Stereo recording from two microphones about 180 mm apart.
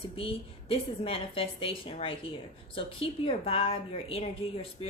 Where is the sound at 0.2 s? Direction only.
30° left (ahead or behind).